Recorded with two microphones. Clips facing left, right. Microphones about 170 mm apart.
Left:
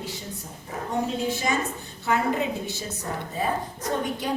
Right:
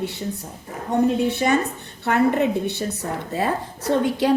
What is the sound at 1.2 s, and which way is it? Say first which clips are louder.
A woman's voice: right 6 dB; 65° right (ahead or behind).